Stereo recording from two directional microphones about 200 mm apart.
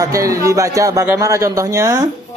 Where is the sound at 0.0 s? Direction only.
15° right (ahead or behind).